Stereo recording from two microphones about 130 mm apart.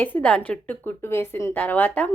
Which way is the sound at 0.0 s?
10° left (ahead or behind).